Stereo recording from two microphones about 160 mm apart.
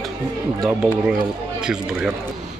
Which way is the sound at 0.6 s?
5° right (ahead or behind).